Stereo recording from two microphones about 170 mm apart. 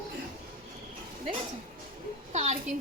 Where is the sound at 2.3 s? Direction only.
45° right (ahead or behind).